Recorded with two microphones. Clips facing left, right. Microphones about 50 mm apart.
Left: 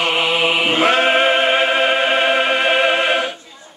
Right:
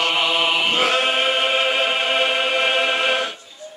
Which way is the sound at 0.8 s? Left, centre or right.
Left.